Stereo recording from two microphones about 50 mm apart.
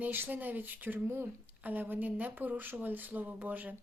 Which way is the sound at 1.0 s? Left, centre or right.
Right.